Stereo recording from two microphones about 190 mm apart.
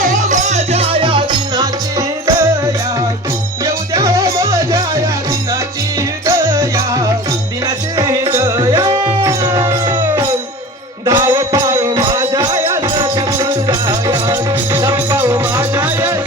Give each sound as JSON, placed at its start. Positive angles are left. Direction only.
{"t": 0.3, "sound": "music", "side_deg": -35}
{"t": 3.9, "sound": "music", "side_deg": -15}
{"t": 6.2, "sound": "music", "side_deg": -15}